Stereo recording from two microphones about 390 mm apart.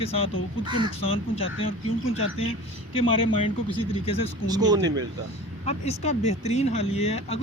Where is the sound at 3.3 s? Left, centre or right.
Centre.